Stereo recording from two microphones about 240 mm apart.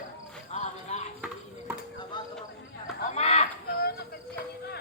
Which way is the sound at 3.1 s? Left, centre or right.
Left.